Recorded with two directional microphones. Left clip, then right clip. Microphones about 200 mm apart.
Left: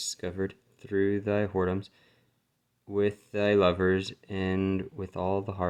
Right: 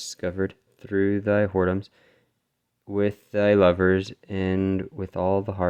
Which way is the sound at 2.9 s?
30° right (ahead or behind).